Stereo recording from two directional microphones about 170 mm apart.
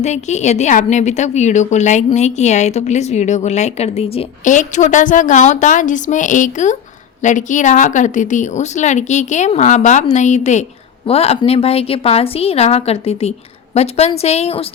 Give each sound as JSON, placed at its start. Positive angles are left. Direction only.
{"t": 0.0, "sound": "a woman's voice", "side_deg": 45}